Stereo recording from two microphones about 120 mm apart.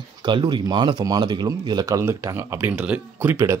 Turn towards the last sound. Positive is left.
turn(degrees=-20)  # may be behind; listen again after turning